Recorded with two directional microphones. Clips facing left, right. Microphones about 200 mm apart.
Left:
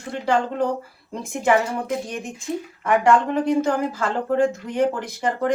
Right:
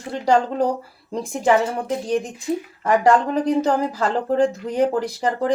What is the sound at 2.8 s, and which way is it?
A woman's voice, 35° right (ahead or behind).